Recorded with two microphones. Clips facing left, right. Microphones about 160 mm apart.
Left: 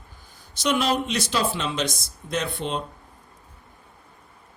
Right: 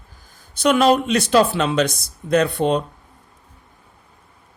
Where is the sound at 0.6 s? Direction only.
55° right (ahead or behind).